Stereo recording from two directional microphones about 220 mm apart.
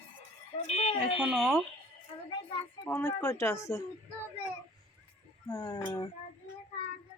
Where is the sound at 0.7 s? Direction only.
25° left (ahead or behind).